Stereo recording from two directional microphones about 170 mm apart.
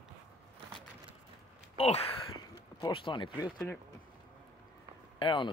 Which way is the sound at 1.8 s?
35° left (ahead or behind).